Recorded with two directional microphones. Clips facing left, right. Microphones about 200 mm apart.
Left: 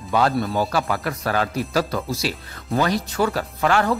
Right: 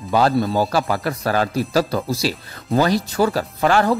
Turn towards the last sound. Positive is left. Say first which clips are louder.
# right 3 dB
turn(degrees=-35)  # may be behind; listen again after turning